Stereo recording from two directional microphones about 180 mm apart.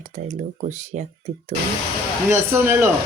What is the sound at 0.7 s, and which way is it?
Speech, 40° right (ahead or behind).